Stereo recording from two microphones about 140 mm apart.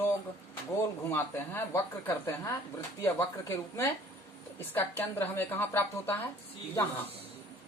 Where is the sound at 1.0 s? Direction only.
15° left (ahead or behind).